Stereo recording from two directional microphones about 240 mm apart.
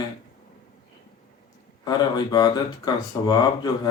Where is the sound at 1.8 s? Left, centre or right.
Centre.